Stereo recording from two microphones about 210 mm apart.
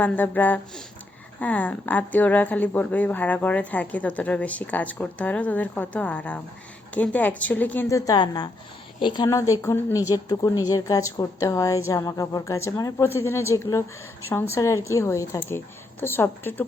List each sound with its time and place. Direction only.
0.0 s speech: 10° left (ahead or behind)